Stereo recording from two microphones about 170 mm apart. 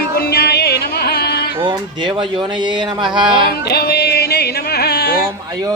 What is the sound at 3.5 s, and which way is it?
Music, 70° left (ahead or behind).